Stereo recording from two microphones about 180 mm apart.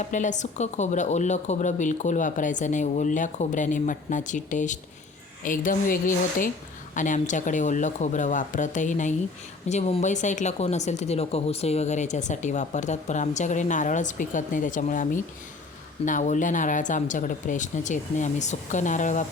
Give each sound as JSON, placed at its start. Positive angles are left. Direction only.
{"t": 0.0, "sound": "speech", "side_deg": 45}